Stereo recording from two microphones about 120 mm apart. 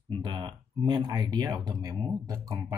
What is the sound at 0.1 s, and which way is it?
Speech, 40° right (ahead or behind).